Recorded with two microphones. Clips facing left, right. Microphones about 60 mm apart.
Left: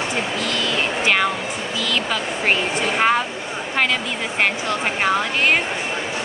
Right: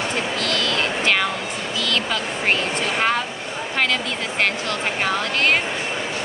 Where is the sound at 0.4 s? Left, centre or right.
Centre.